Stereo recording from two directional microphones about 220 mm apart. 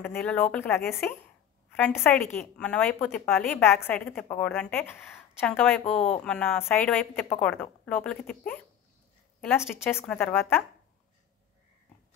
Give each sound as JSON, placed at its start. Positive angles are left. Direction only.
{"t": 0.0, "sound": "a woman's voice", "side_deg": 10}